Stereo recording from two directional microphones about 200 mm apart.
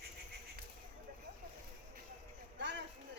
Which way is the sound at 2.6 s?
60° right (ahead or behind).